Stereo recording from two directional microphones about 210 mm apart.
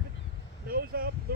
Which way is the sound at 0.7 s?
45° right (ahead or behind).